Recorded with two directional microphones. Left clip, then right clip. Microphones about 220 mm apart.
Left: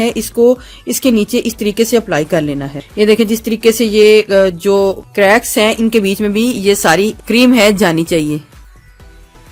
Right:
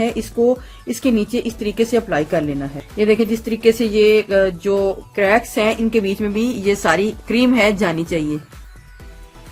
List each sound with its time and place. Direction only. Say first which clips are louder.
0.0 s speech: left 6 dB; 50° left (ahead or behind)